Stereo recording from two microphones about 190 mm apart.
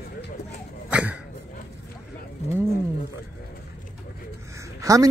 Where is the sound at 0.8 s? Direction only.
5° right (ahead or behind).